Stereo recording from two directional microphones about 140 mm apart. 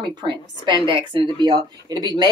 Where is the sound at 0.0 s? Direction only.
30° right (ahead or behind).